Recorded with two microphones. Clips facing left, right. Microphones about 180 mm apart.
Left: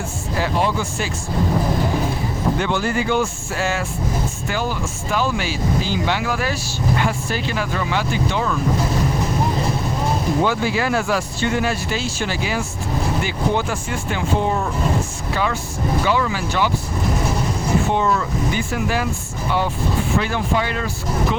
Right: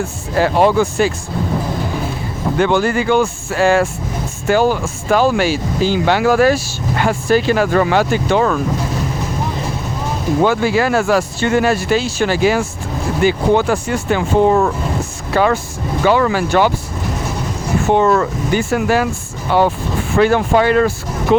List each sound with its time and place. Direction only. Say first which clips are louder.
0.3 s speech: right 9 dB; 60° right (ahead or behind)
2.6 s speech: right 6 dB; 55° right (ahead or behind)
10.4 s speech: right 10 dB; 55° right (ahead or behind)
14.1 s speech: right 8 dB; 70° right (ahead or behind)
16.0 s speech: right 11 dB; 55° right (ahead or behind)
17.8 s speech: right 7 dB; 55° right (ahead or behind)